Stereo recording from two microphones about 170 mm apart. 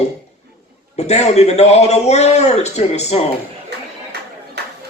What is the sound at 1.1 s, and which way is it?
Speech, 40° left (ahead or behind).